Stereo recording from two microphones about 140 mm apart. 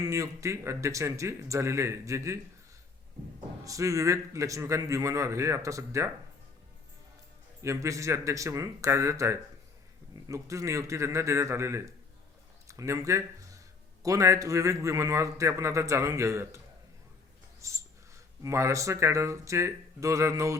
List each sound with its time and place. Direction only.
0.0 s a man's voice: 20° right (ahead or behind)
3.6 s a man's voice: 25° right (ahead or behind)
7.6 s a man's voice: 20° right (ahead or behind)
17.6 s a sound: 20° right (ahead or behind)
18.4 s a man's voice: 20° right (ahead or behind)